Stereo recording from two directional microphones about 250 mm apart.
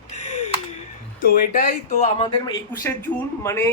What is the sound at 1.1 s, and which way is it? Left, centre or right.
Speech, left.